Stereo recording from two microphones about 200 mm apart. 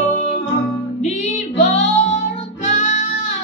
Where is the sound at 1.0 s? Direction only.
35° left (ahead or behind).